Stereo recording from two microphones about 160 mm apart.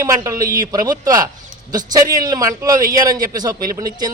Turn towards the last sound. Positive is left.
turn(degrees=-25)  # may be behind; listen again after turning